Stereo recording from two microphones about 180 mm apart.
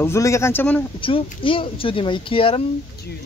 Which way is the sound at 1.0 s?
30° left (ahead or behind).